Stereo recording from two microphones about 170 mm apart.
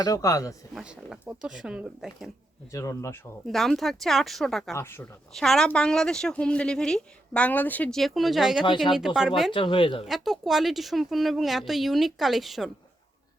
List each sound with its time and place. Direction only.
0.0 s speech: 20° left (ahead or behind)
0.7 s speech: 5° right (ahead or behind)
2.7 s speech: 20° left (ahead or behind)
3.4 s speech: centre (ahead or behind)
4.7 s speech: 15° left (ahead or behind)
5.3 s speech: centre (ahead or behind)
8.6 s speech: 30° left (ahead or behind)
9.0 s speech: 5° right (ahead or behind)
9.5 s speech: 30° left (ahead or behind)
10.1 s speech: centre (ahead or behind)